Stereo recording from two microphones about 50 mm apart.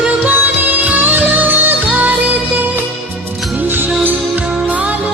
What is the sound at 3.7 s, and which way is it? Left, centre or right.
Music, right.